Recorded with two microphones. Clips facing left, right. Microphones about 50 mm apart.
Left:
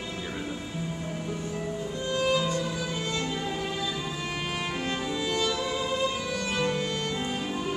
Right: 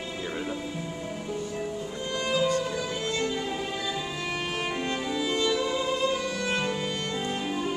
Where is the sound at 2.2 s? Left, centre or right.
Centre.